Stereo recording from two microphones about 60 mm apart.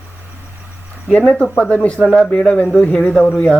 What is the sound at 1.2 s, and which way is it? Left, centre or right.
A man's voice, left.